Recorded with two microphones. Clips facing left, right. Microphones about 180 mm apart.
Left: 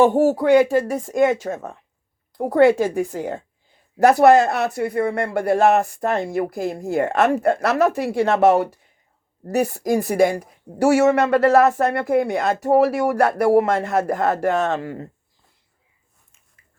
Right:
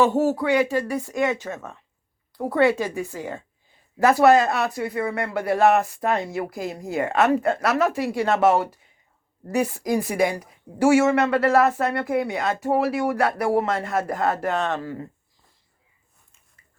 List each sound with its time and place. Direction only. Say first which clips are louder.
0.0 s speech: left 4 dB; 50° left (ahead or behind)
9.4 s speech: left 3 dB; 40° left (ahead or behind); by 15.0 s 55° left (ahead or behind)